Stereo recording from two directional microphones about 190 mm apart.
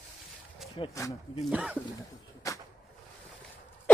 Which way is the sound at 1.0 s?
15° left (ahead or behind).